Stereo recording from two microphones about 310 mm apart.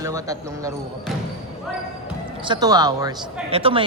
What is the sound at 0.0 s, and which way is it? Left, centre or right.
Speech, centre.